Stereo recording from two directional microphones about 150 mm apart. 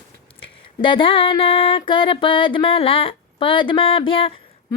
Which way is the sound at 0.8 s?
35° left (ahead or behind).